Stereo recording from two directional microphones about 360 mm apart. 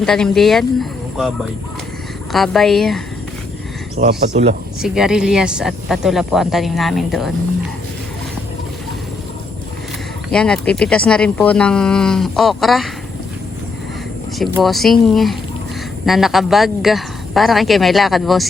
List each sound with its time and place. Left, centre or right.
0.0 s speech: centre
2.3 s speech: centre
3.9 s speech: centre
4.8 s speech: centre
10.3 s speech: centre
14.3 s speech: centre